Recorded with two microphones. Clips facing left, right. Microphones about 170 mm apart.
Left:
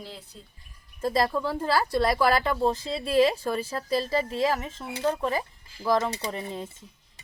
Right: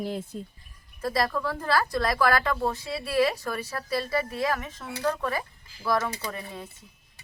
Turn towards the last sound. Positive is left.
turn(degrees=20)  # may be behind; listen again after turning